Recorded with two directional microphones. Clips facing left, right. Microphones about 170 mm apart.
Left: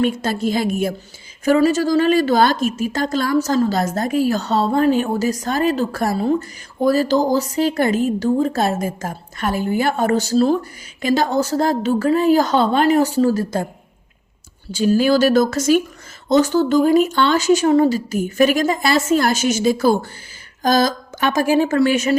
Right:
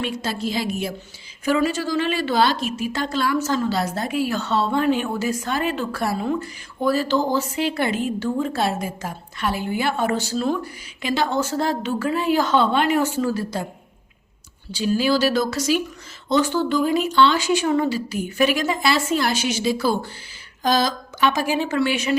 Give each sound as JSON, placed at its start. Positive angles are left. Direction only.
{"t": 0.0, "sound": "a woman's voice", "side_deg": 50}
{"t": 14.7, "sound": "speech", "side_deg": 45}